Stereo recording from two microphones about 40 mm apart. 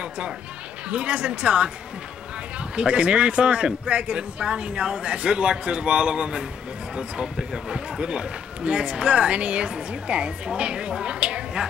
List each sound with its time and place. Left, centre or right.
0.8 s speech: right
2.7 s speech: right